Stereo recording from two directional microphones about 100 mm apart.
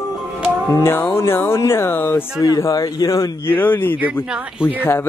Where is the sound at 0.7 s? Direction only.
25° left (ahead or behind).